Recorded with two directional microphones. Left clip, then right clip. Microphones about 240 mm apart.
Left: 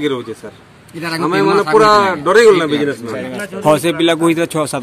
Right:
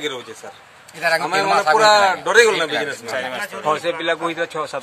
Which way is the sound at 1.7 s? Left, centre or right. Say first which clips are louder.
Left 5 dB; centre.